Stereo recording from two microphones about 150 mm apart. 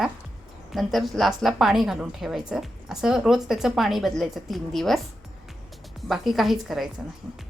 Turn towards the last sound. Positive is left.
turn(degrees=0)  # may be behind; listen again after turning